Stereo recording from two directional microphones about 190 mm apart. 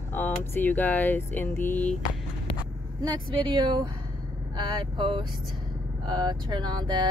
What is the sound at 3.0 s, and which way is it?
Speech, 20° right (ahead or behind).